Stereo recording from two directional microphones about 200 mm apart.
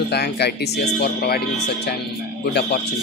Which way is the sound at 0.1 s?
55° left (ahead or behind).